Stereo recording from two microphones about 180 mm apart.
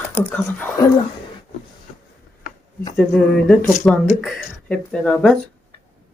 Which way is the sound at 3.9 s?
5° left (ahead or behind).